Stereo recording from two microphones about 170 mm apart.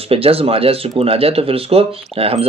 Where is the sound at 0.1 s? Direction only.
35° right (ahead or behind).